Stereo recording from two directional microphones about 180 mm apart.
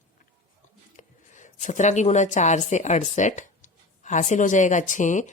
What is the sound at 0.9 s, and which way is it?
Speech, 45° left (ahead or behind).